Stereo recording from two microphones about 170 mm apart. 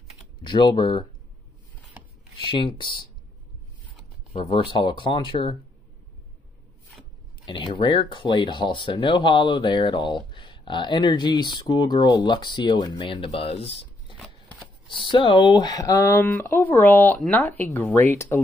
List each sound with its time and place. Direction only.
0.4 s speech: 25° left (ahead or behind)
2.0 s a sound: 10° right (ahead or behind)
2.4 s speech: 30° left (ahead or behind)
4.3 s speech: 30° left (ahead or behind)
7.4 s speech: 25° left (ahead or behind)
14.1 s shuffling cards: centre (ahead or behind)
15.0 s speech: 30° left (ahead or behind)